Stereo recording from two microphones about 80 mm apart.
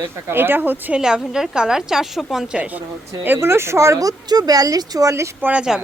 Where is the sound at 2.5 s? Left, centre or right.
Centre.